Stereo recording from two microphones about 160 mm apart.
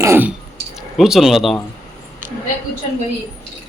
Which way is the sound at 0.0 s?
15° right (ahead or behind).